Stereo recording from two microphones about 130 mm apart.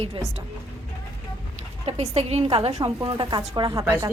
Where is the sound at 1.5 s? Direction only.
55° right (ahead or behind); by 3.4 s 35° right (ahead or behind).